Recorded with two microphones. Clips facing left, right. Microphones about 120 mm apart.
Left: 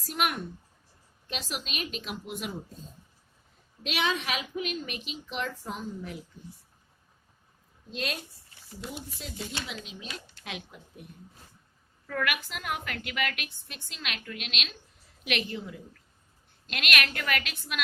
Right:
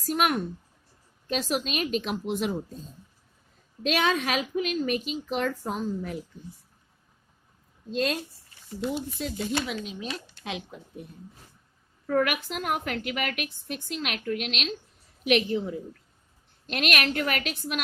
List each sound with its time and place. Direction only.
0.1 s a woman's voice: 40° right (ahead or behind)
3.8 s a woman's voice: 45° right (ahead or behind)
7.9 s a woman's voice: 35° right (ahead or behind)
9.5 s a woman's voice: 50° right (ahead or behind)
10.1 s speech: 30° right (ahead or behind)
12.0 s a woman's voice: 45° right (ahead or behind)